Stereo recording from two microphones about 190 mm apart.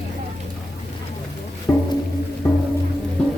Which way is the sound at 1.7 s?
15° left (ahead or behind).